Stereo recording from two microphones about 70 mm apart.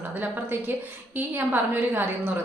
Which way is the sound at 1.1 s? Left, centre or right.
Right.